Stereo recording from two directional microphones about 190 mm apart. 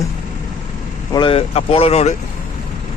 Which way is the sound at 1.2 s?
30° left (ahead or behind).